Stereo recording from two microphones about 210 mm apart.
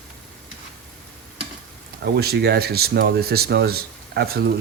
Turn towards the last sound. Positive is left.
turn(degrees=-45)  # may be behind; listen again after turning